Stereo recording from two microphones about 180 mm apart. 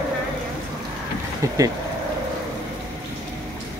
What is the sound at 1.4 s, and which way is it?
Vehicle, 20° right (ahead or behind).